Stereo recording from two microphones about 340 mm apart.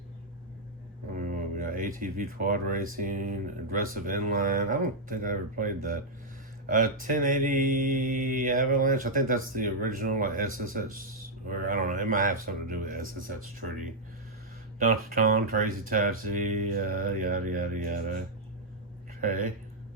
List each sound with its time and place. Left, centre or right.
1.1 s speech: right
14.8 s speech: right
19.2 s speech: right